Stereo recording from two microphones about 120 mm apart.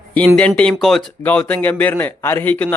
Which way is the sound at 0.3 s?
10° left (ahead or behind).